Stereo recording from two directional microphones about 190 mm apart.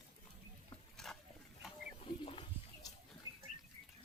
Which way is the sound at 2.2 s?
30° left (ahead or behind).